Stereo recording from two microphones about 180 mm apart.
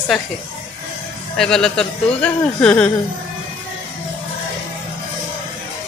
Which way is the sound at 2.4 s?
5° left (ahead or behind).